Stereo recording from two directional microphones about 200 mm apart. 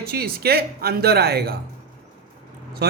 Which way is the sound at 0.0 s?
50° right (ahead or behind).